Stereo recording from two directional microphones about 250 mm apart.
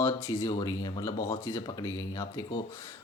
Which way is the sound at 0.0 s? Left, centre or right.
Centre.